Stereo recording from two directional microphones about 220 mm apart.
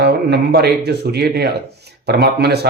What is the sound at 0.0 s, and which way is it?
Speech, 50° right (ahead or behind).